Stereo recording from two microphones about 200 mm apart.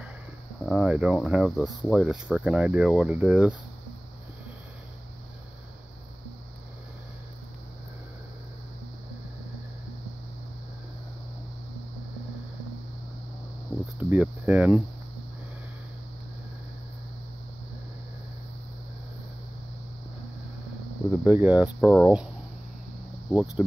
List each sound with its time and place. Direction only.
0.7 s speech: centre (ahead or behind)
13.9 s speech: 5° right (ahead or behind)
21.2 s speech: 5° right (ahead or behind)
23.3 s speech: centre (ahead or behind)